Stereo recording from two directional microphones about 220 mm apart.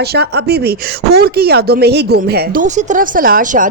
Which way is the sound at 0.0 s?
50° right (ahead or behind).